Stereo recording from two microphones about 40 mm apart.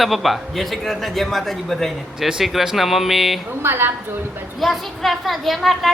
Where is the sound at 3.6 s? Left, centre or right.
Right.